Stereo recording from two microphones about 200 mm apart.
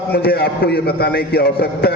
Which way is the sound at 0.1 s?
55° left (ahead or behind).